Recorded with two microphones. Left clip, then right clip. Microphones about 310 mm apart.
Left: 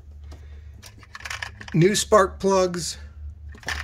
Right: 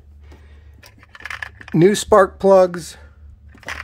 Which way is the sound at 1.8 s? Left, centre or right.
Right.